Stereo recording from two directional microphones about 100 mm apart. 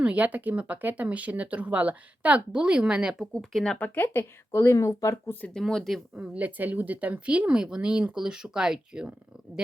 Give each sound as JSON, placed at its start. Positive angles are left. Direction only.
{"t": 0.0, "sound": "speech", "side_deg": -15}
{"t": 3.3, "sound": "speech", "side_deg": 5}
{"t": 3.8, "sound": "speech", "side_deg": 20}
{"t": 5.5, "sound": "speech", "side_deg": 5}
{"t": 6.1, "sound": "speech", "side_deg": -15}